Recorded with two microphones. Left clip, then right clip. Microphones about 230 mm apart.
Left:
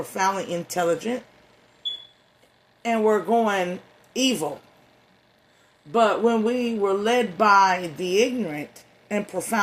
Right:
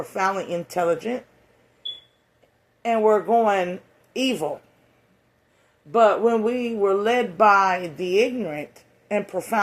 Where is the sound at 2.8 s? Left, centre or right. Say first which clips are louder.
Right 2 dB; left.